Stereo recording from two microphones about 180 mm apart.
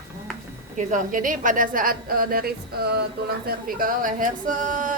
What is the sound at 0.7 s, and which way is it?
Speech, 45° right (ahead or behind).